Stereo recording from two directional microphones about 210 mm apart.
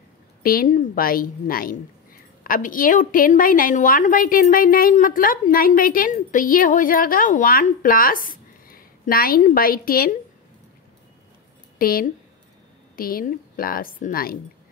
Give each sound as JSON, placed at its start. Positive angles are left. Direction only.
{"t": 0.4, "sound": "a woman's voice", "side_deg": 45}
{"t": 11.8, "sound": "a woman's voice", "side_deg": 45}